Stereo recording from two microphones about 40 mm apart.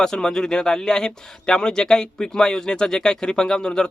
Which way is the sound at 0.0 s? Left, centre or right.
Centre.